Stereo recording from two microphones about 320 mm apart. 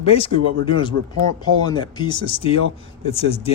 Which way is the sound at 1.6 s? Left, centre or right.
Centre.